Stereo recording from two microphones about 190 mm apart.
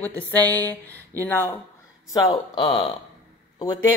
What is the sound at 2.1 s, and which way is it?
Speech, 25° left (ahead or behind).